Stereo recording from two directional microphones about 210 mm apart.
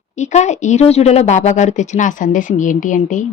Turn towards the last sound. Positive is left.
turn(degrees=35)  # may be behind; listen again after turning